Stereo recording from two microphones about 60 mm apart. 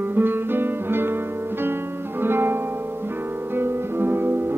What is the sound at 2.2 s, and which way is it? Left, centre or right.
Music, right.